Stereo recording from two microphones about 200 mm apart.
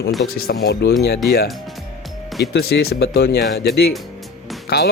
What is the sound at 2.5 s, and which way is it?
Speech, 50° left (ahead or behind).